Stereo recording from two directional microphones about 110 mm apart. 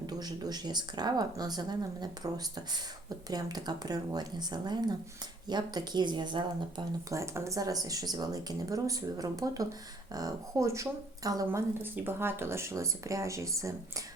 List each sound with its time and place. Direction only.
0.0 s speech: 35° right (ahead or behind)
7.1 s speech: 25° right (ahead or behind)
11.8 s speech: 20° right (ahead or behind)